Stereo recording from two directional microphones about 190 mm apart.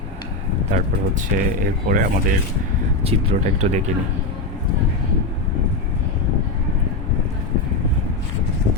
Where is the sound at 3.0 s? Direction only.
30° right (ahead or behind).